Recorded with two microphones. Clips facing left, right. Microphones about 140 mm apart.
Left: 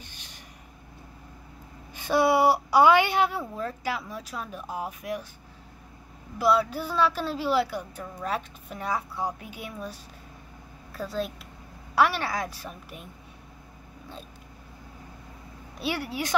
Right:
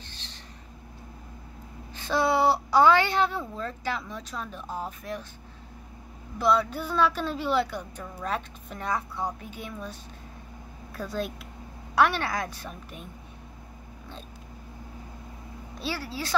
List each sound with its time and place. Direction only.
0.0 s a sound: 15° left (ahead or behind)
2.0 s a woman's voice: 10° left (ahead or behind)
6.3 s a woman's voice: 5° left (ahead or behind)
15.8 s a woman's voice: 15° left (ahead or behind)